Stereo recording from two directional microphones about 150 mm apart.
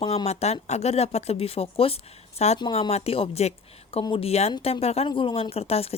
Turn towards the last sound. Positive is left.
turn(degrees=40)  # may be behind; listen again after turning